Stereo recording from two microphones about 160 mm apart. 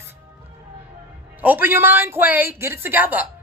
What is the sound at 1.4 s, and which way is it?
A woman's voice, 10° right (ahead or behind).